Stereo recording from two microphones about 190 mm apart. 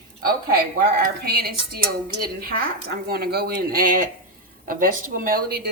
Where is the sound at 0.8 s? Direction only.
50° right (ahead or behind).